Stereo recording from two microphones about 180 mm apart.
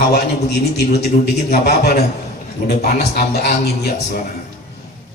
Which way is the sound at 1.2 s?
60° left (ahead or behind).